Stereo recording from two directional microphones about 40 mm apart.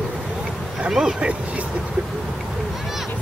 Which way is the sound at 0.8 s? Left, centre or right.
Centre.